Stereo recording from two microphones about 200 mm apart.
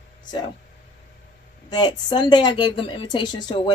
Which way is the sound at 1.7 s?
20° left (ahead or behind).